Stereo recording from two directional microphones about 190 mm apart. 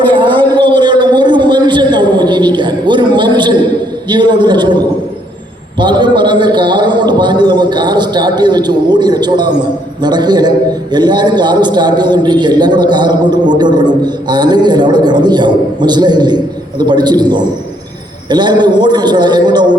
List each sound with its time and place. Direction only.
0.0 s a sound: 25° right (ahead or behind)
4.1 s a man's voice: 25° right (ahead or behind)
5.8 s a man's voice: 25° right (ahead or behind)